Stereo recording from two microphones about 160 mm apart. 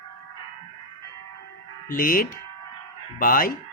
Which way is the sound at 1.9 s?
60° left (ahead or behind).